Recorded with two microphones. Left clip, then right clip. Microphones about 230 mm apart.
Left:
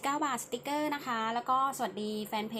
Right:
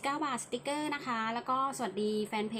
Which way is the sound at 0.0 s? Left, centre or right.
Centre.